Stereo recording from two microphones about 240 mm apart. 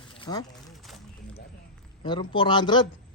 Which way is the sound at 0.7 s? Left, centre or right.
Centre.